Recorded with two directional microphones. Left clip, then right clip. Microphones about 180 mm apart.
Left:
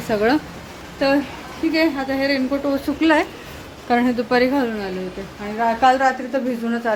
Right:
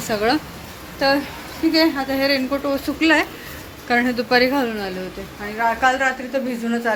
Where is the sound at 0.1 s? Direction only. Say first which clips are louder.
Left 1 dB; 25° left (ahead or behind).